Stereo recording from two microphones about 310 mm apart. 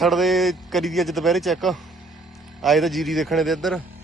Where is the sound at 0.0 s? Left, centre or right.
Centre.